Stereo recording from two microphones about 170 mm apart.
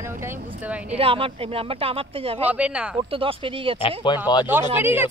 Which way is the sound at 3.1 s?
30° right (ahead or behind).